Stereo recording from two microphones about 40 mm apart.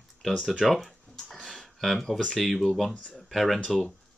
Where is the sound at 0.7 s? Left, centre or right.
Centre.